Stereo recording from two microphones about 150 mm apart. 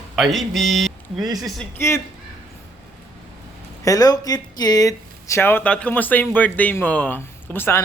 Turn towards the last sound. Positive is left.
turn(degrees=15)  # may be behind; listen again after turning